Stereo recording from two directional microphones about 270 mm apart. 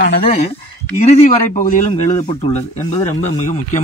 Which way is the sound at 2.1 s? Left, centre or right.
Centre.